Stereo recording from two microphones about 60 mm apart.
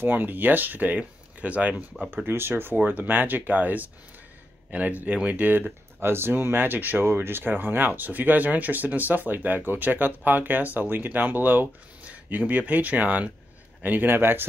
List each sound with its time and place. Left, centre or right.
0.0 s speech: right
2.2 s speech: right